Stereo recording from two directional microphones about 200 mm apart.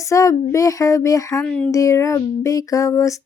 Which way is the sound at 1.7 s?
15° left (ahead or behind).